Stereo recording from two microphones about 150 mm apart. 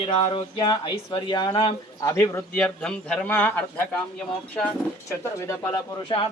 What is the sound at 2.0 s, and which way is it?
A man's voice, 20° left (ahead or behind).